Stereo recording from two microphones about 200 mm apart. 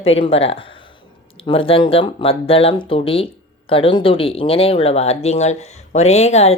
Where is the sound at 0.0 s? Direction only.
30° left (ahead or behind).